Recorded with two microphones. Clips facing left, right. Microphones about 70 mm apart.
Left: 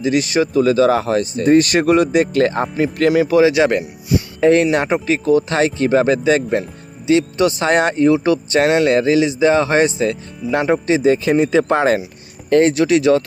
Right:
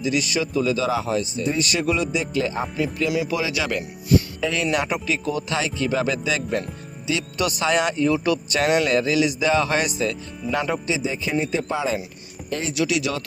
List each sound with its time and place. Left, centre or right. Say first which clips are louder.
0.0 s speech: left 7 dB; left
3.1 s speech: left 11 dB; left
4.4 s speech: left 10 dB; left
10.4 s speech: left 6 dB; centre
10.8 s speech: left 11 dB; left
12.7 s speech: left 10 dB; left